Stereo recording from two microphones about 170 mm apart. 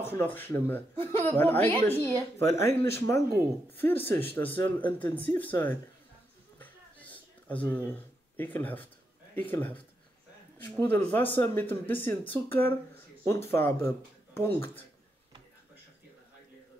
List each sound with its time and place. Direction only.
0.0 s speech: 15° left (ahead or behind)
6.6 s a sound: 10° left (ahead or behind)
8.4 s speech: 10° left (ahead or behind)